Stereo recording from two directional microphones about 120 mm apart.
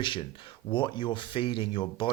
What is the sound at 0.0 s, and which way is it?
Speech, 45° left (ahead or behind).